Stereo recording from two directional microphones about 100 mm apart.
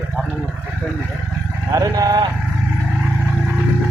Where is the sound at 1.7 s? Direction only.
35° right (ahead or behind).